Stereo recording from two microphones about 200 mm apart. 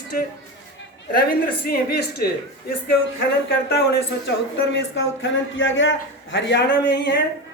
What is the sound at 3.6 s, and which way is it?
Speech, 55° left (ahead or behind).